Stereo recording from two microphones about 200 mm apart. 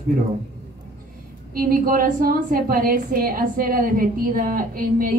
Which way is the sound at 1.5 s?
45° right (ahead or behind).